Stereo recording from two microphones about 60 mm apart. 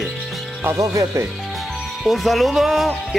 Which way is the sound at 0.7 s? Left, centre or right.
Right.